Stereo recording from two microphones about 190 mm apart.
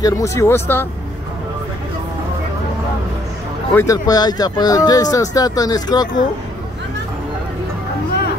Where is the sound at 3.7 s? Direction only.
15° left (ahead or behind).